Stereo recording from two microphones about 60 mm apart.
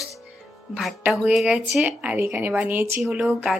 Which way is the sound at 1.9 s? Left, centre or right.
Right.